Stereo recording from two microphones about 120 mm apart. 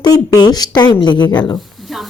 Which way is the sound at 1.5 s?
Centre (ahead or behind).